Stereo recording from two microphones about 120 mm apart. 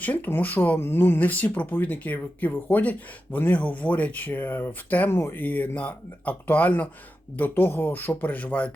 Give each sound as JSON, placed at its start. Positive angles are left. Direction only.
{"t": 0.0, "sound": "speech", "side_deg": 15}